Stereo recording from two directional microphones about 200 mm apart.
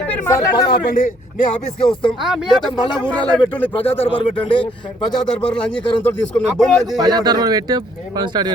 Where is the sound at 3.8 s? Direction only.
30° left (ahead or behind).